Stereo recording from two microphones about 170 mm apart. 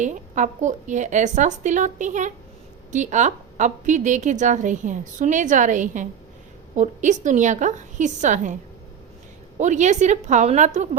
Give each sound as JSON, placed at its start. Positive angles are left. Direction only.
{"t": 0.0, "sound": "a woman's voice", "side_deg": -45}
{"t": 9.6, "sound": "a woman's voice", "side_deg": -45}